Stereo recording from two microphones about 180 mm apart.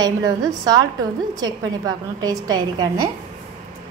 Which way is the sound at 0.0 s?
20° right (ahead or behind).